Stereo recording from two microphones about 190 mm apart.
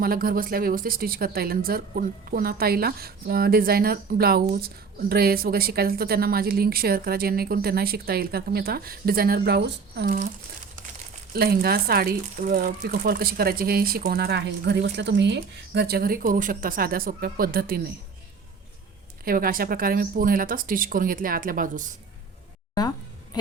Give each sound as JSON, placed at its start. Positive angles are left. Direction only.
{"t": 0.0, "sound": "speech", "side_deg": -50}
{"t": 11.3, "sound": "speech", "side_deg": -55}
{"t": 19.2, "sound": "speech", "side_deg": -50}